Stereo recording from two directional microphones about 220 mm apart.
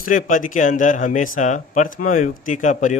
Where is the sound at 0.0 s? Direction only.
40° left (ahead or behind).